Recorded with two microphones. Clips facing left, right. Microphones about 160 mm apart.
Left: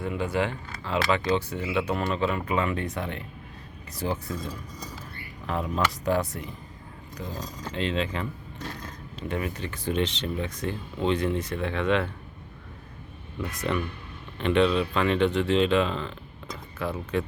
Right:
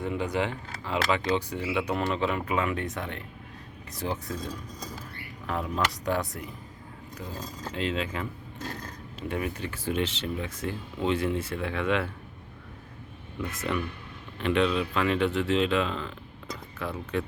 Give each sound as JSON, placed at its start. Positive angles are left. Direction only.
{"t": 0.0, "sound": "speech", "side_deg": -20}
{"t": 2.5, "sound": "speech", "side_deg": -5}
{"t": 5.5, "sound": "speech", "side_deg": 0}
{"t": 7.7, "sound": "speech", "side_deg": -5}
{"t": 9.3, "sound": "speech", "side_deg": -10}
{"t": 13.5, "sound": "speech", "side_deg": 0}